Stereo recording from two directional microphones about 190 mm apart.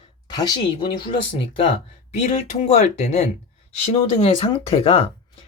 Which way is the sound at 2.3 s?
35° left (ahead or behind).